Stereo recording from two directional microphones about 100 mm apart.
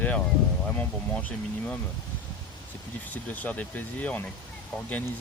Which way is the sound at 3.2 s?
15° left (ahead or behind).